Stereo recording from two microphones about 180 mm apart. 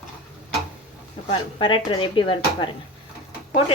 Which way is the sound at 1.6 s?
30° left (ahead or behind).